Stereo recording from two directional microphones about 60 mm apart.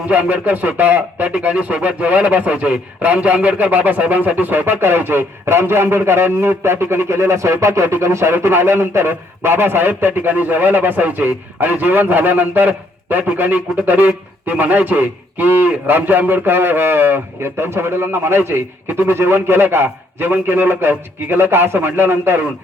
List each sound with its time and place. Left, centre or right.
0.1 s a man's voice: right